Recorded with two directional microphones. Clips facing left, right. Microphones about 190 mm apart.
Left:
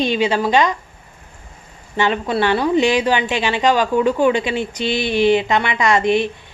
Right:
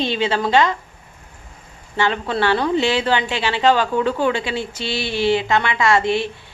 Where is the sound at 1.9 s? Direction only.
15° left (ahead or behind).